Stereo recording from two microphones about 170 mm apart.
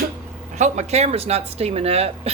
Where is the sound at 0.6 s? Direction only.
40° right (ahead or behind).